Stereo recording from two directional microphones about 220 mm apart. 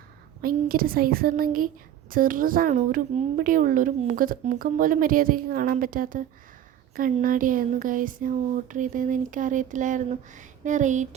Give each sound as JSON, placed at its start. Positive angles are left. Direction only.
{"t": 0.4, "sound": "a woman's voice", "side_deg": -40}